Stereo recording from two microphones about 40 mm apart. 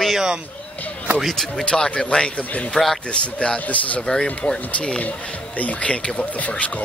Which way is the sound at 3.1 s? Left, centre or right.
Left.